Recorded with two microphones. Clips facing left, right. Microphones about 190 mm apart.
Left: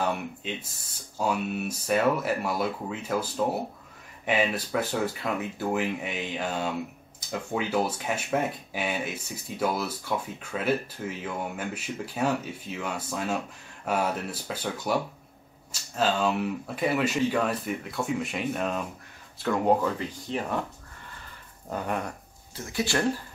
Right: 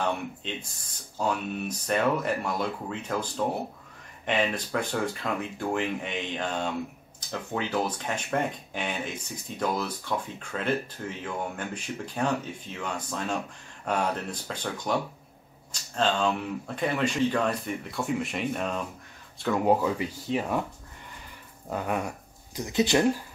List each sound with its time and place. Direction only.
0.0 s speech: 5° left (ahead or behind)
21.6 s speech: 5° right (ahead or behind)
22.6 s speech: 20° right (ahead or behind)